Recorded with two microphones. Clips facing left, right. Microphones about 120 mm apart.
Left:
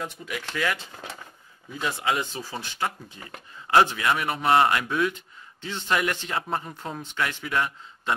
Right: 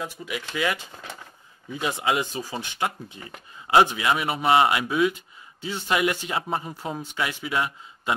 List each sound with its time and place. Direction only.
0.0 s a man's voice: 5° right (ahead or behind)